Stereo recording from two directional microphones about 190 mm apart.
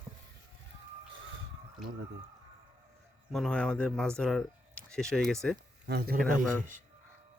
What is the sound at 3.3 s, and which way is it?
Speech, 5° left (ahead or behind).